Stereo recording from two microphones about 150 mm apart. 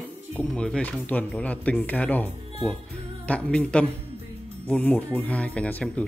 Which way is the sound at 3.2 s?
5° left (ahead or behind).